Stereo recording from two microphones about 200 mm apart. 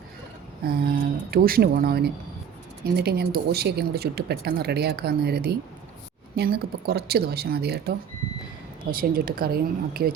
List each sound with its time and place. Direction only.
0.6 s speech: 45° right (ahead or behind)